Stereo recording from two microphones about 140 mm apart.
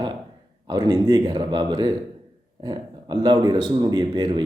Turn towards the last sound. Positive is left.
turn(degrees=-35)  # may be behind; listen again after turning